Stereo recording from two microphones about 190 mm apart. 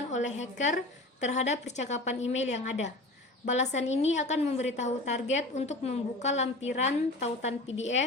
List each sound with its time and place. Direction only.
0.1 s a woman's voice: 40° left (ahead or behind)